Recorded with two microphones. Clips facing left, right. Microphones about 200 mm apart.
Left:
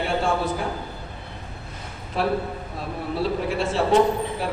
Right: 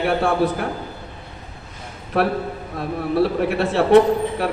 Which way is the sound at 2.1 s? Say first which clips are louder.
Right 4 dB; 65° right (ahead or behind).